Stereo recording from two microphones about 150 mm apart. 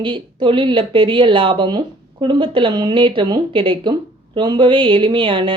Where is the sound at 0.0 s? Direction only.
30° right (ahead or behind).